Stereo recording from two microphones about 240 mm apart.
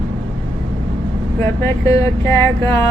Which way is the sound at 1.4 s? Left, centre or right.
Centre.